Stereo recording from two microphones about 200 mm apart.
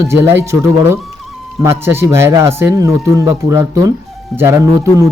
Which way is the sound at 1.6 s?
10° right (ahead or behind).